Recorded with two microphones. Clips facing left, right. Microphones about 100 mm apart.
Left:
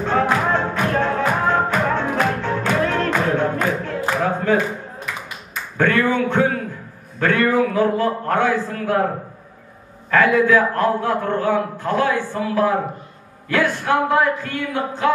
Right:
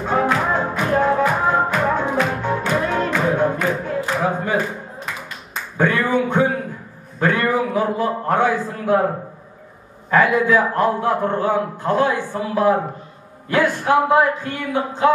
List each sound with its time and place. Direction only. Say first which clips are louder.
0.0 s music: even; 10° right (ahead or behind)
5.8 s a sound: even; 15° right (ahead or behind)
10.1 s a man's voice: left 1 dB; 15° right (ahead or behind)